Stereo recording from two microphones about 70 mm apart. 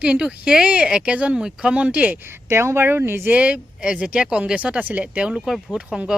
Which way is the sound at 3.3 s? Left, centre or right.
Centre.